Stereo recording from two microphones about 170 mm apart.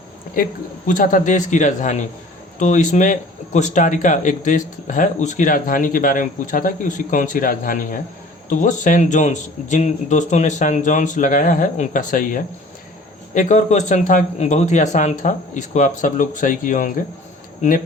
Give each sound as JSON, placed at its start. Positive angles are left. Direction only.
{"t": 0.4, "sound": "speech", "side_deg": 55}